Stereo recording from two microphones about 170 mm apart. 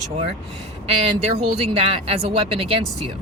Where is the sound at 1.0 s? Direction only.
35° right (ahead or behind).